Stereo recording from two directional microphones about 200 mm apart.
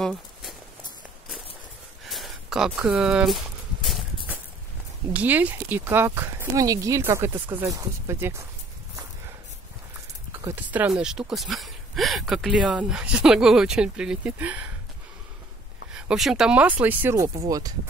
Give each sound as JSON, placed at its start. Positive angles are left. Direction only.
{"t": 0.0, "sound": "walk", "side_deg": 0}
{"t": 2.0, "sound": "a sound", "side_deg": 0}
{"t": 5.1, "sound": "speech", "side_deg": -10}
{"t": 10.4, "sound": "speech", "side_deg": -10}
{"t": 15.9, "sound": "speech", "side_deg": -5}